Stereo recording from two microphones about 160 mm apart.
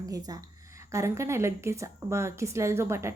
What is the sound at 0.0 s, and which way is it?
A woman's voice, 25° right (ahead or behind).